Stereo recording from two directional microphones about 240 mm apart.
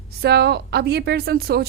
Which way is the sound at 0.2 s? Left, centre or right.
Right.